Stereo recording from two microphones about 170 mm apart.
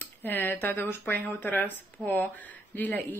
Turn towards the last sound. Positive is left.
turn(degrees=10)  # may be behind; listen again after turning